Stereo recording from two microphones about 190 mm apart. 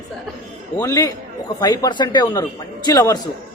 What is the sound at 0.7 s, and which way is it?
Speech, 15° left (ahead or behind).